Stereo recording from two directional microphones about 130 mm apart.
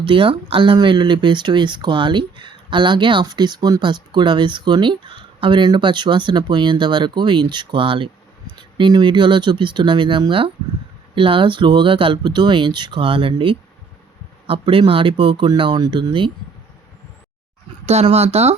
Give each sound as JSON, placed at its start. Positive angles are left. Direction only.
{"t": 0.0, "sound": "speech", "side_deg": -40}
{"t": 17.8, "sound": "speech", "side_deg": -55}